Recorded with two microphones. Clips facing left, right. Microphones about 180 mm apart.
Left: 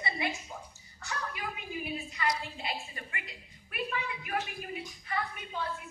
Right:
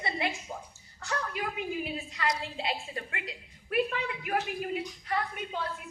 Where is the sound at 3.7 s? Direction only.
60° right (ahead or behind).